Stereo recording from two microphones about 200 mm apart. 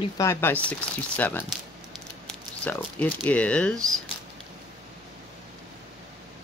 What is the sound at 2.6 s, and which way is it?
A woman's voice, 10° left (ahead or behind).